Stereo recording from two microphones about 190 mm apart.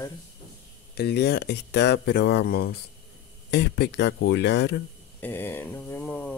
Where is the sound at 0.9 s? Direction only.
60° left (ahead or behind).